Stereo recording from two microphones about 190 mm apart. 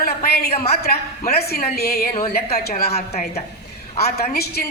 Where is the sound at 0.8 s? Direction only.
55° left (ahead or behind).